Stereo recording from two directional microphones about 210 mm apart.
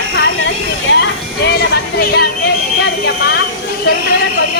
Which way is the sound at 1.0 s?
55° left (ahead or behind).